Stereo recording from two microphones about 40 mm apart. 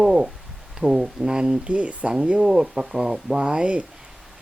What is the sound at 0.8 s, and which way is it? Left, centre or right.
Speech, centre.